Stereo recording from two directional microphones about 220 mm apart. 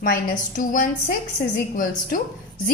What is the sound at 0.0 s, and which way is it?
Speech, 40° left (ahead or behind).